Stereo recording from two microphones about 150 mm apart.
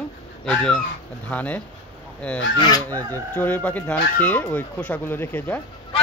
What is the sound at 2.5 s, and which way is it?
Speech, 30° left (ahead or behind).